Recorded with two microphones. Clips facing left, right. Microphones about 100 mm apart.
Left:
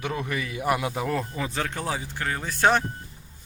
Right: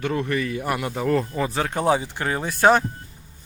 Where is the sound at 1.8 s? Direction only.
20° right (ahead or behind).